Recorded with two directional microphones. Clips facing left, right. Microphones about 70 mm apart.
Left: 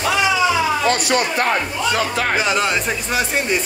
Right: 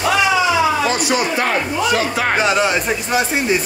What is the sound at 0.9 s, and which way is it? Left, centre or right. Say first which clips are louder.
Speech: even; left.